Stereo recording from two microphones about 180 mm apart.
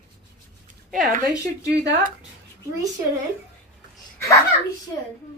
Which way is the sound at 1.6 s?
70° right (ahead or behind).